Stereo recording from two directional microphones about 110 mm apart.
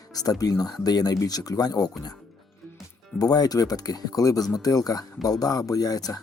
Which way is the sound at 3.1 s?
35° left (ahead or behind).